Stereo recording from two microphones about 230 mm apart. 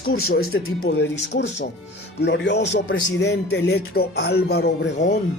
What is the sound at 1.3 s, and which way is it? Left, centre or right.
Speech, left.